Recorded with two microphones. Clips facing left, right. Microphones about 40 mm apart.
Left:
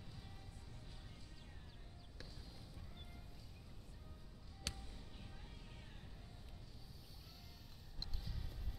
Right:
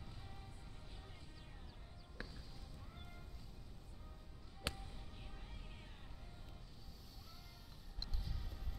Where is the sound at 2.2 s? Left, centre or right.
Right.